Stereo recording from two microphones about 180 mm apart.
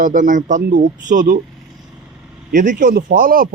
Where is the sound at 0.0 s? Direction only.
45° right (ahead or behind).